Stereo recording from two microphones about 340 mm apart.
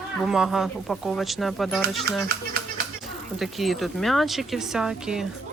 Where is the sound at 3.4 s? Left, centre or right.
Centre.